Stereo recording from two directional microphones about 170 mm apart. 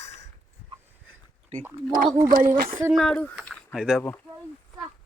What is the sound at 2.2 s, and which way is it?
Speech, 50° right (ahead or behind).